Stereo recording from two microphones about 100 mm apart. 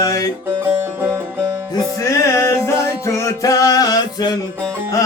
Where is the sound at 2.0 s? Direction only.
30° left (ahead or behind).